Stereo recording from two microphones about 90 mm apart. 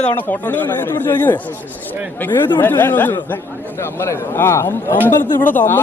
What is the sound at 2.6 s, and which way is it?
Speech, 20° left (ahead or behind).